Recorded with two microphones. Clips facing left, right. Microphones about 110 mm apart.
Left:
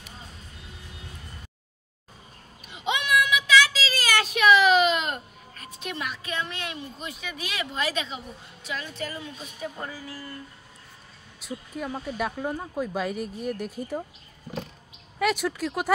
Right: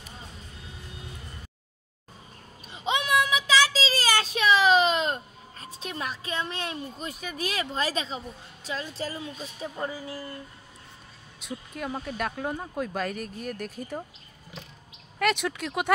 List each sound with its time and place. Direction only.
2.7 s child singing: 35° right (ahead or behind)
8.6 s a woman's voice: 30° right (ahead or behind)
11.4 s speech: centre (ahead or behind)
15.1 s speech: 5° left (ahead or behind)